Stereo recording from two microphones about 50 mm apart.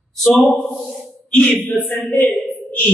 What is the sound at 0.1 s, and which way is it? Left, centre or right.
A man's voice, centre.